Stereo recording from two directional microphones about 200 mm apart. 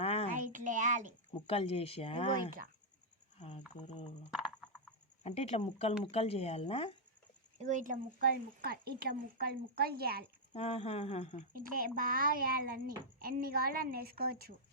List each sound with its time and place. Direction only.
0.0 s a sound: 30° left (ahead or behind)
0.3 s a sound: 40° right (ahead or behind)
1.3 s speech: 30° left (ahead or behind)
2.3 s speech: 45° right (ahead or behind)
4.3 s a sound: 5° right (ahead or behind)
5.2 s speech: 30° left (ahead or behind)
7.6 s speech: 40° right (ahead or behind)
8.6 s speech: 50° right (ahead or behind)
10.5 s speech: 30° left (ahead or behind)
11.5 s speech: 45° right (ahead or behind)